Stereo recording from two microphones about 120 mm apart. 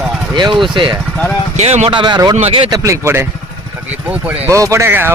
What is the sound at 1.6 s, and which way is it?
Speech, 65° right (ahead or behind).